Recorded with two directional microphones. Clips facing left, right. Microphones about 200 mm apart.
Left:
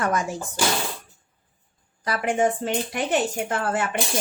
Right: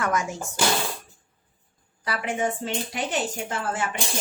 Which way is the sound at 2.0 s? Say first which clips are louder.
Left 5 dB; 45° left (ahead or behind).